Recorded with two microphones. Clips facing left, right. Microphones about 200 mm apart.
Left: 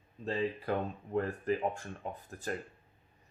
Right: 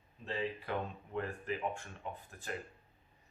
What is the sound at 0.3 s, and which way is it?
Speech, 40° left (ahead or behind).